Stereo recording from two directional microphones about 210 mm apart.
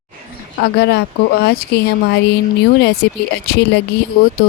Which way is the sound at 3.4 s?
50° left (ahead or behind).